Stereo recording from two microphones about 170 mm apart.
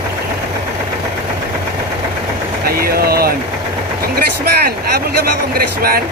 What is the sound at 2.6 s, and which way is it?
Vehicle, 65° right (ahead or behind).